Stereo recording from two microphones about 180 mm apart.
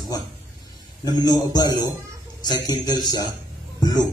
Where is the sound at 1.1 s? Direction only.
20° left (ahead or behind).